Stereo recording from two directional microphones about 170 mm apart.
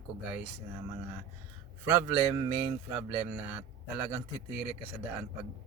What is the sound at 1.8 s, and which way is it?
Speech, 15° right (ahead or behind).